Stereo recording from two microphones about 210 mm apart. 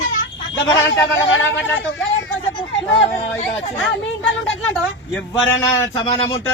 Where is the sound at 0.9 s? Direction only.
65° left (ahead or behind).